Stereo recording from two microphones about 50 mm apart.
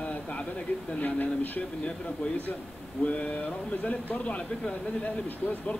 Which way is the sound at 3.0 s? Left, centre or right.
Left.